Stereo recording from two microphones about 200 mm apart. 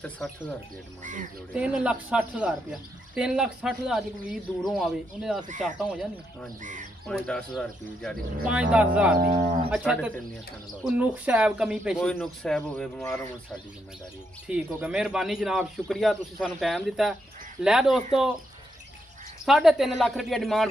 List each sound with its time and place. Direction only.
1.0 s speech: 40° right (ahead or behind)
1.5 s speech: 5° right (ahead or behind)
6.6 s speech: 40° right (ahead or behind)
7.1 s speech: 5° left (ahead or behind)
14.5 s speech: 5° right (ahead or behind)
19.4 s speech: centre (ahead or behind)